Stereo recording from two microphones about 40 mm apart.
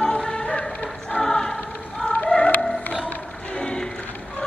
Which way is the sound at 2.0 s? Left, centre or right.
Left.